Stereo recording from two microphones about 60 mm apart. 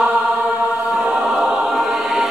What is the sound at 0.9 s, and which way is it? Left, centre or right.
Choir, centre.